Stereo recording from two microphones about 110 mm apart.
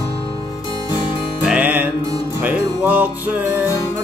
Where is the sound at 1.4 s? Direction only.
15° right (ahead or behind).